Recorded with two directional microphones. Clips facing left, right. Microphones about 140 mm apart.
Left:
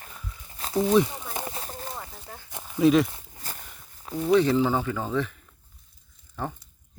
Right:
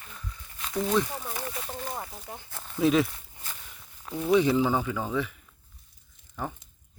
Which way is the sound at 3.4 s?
40° left (ahead or behind).